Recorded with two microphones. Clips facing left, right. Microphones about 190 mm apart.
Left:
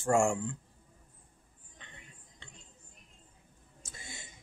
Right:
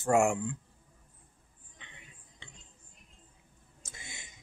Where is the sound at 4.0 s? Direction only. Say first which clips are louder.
Left 2 dB; 20° right (ahead or behind).